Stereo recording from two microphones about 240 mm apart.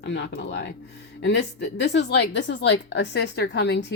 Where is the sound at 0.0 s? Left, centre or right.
Left.